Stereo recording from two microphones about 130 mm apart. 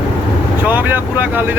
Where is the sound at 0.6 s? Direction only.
15° right (ahead or behind).